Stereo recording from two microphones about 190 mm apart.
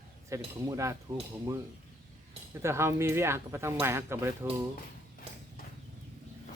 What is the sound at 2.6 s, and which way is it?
Speech, 15° right (ahead or behind).